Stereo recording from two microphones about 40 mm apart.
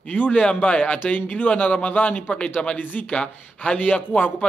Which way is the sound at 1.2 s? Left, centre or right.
Left.